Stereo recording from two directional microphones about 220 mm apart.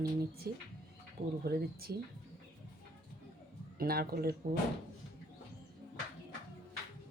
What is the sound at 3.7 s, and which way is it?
Speech, 45° right (ahead or behind).